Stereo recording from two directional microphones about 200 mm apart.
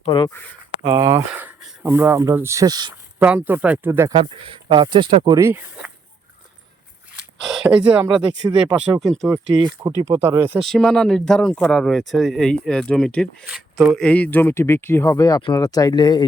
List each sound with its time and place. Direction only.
0.0 s speech: 25° left (ahead or behind)
0.9 s speech: 15° right (ahead or behind)
3.2 s speech: 10° right (ahead or behind)
4.1 s speech: 25° right (ahead or behind); by 5.9 s 10° right (ahead or behind)
8.0 s speech: 20° right (ahead or behind)
9.0 s speech: 5° left (ahead or behind)
9.5 s speech: 20° right (ahead or behind)
10.6 s speech: centre (ahead or behind); by 16.2 s 20° left (ahead or behind)